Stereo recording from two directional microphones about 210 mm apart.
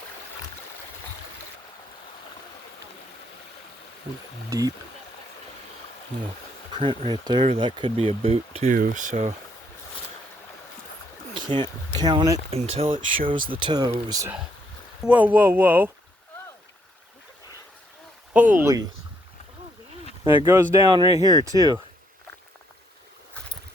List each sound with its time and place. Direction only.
4.4 s speech: 15° right (ahead or behind)
6.7 s speech: 25° right (ahead or behind)
8.7 s speech: 40° right (ahead or behind)
11.3 s speech: 20° right (ahead or behind)
12.5 s speech: 30° right (ahead or behind)
13.1 s speech: 40° right (ahead or behind)
13.5 s speech: 20° right (ahead or behind)
18.3 s speech: 10° right (ahead or behind)
20.2 s speech: 15° right (ahead or behind)